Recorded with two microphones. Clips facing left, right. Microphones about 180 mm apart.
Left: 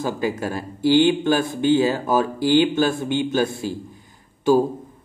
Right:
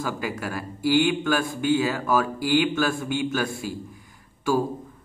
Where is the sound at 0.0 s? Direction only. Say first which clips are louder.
Left 5 dB; 25° left (ahead or behind).